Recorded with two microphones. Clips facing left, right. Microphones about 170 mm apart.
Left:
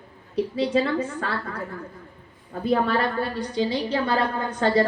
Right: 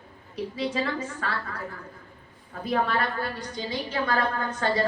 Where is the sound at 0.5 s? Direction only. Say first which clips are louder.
Left 6 dB; 30° left (ahead or behind).